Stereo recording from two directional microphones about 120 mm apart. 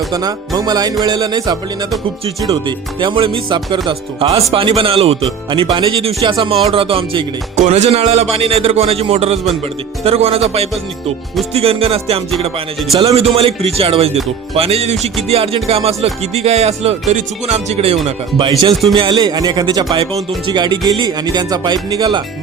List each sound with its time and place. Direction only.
0.1 s music: 30° right (ahead or behind)
2.5 s speech: 40° right (ahead or behind)
5.5 s speech: 40° right (ahead or behind)
7.5 s speech: 75° right (ahead or behind)
11.5 s speech: 55° right (ahead or behind)
18.7 s a man's voice: centre (ahead or behind)
18.9 s music: 45° right (ahead or behind)